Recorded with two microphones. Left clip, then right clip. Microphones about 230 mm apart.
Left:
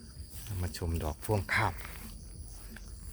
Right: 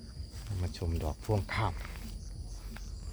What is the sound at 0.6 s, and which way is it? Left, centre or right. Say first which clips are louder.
Speech: left 1 dB; centre.